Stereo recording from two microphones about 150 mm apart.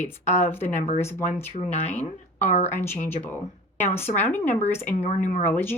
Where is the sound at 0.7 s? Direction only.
50° left (ahead or behind).